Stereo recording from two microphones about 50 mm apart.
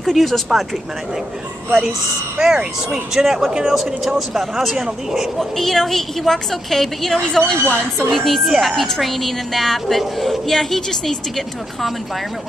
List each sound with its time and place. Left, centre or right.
0.0 s a woman's voice: centre
1.7 s a woman's voice: centre
2.3 s speech: centre
5.4 s a woman's voice: centre
7.2 s a woman's voice: centre